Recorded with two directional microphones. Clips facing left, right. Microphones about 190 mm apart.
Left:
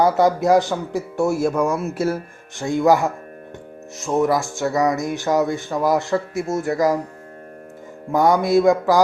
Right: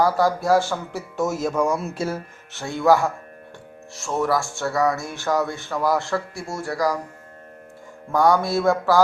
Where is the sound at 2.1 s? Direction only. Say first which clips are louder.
Left 5 dB; 15° left (ahead or behind).